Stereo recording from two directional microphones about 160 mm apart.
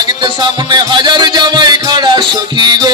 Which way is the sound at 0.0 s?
30° right (ahead or behind).